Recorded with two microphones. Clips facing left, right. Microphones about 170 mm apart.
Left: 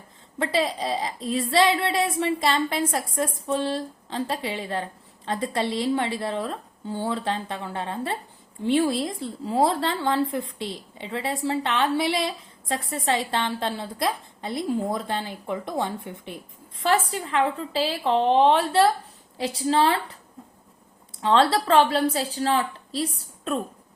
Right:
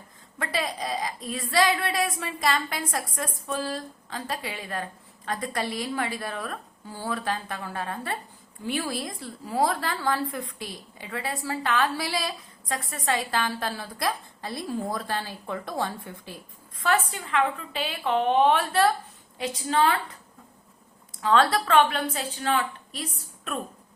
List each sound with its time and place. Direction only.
0.3 s a woman's voice: 25° left (ahead or behind)
21.2 s a woman's voice: 25° left (ahead or behind)